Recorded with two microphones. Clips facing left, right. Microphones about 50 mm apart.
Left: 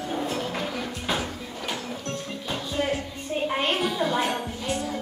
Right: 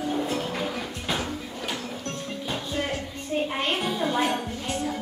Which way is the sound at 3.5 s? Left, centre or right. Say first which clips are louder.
Left 2 dB; centre.